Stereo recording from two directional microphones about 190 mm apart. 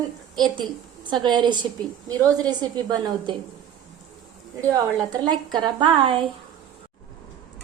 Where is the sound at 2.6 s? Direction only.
25° right (ahead or behind).